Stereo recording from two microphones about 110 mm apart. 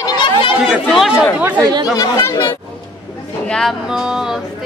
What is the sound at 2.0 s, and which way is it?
Speech, 30° left (ahead or behind).